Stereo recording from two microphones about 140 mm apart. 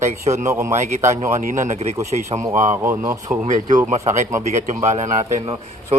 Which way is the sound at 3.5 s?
65° right (ahead or behind).